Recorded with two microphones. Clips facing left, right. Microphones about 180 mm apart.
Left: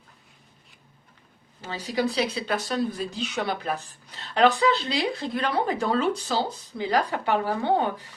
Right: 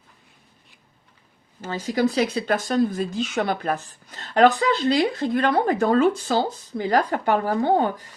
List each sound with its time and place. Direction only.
1.6 s speech: 45° right (ahead or behind)